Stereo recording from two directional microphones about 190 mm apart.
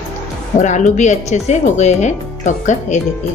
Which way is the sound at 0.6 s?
40° left (ahead or behind).